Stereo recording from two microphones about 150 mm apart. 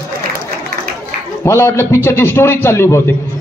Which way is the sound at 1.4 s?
15° left (ahead or behind).